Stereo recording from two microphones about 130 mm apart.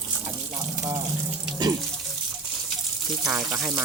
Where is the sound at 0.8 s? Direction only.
30° right (ahead or behind).